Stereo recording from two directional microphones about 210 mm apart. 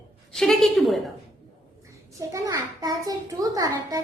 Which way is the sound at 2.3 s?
15° right (ahead or behind).